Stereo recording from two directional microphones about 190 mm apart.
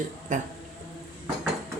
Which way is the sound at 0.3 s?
40° right (ahead or behind).